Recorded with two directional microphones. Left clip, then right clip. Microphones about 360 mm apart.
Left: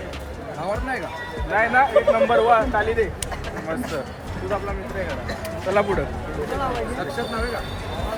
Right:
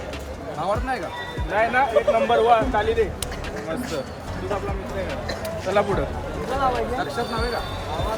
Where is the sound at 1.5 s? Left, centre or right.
Centre.